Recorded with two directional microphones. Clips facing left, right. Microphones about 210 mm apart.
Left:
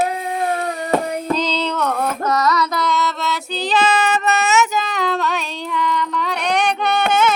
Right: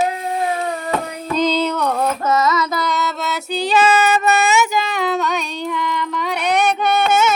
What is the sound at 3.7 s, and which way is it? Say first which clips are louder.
Child singing: right 2 dB; 10° right (ahead or behind).